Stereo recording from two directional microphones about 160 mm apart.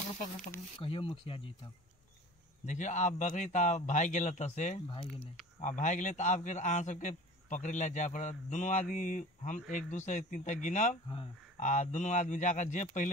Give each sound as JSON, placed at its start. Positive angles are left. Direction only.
{"t": 0.8, "sound": "speech", "side_deg": 35}
{"t": 2.6, "sound": "a man's voice", "side_deg": 50}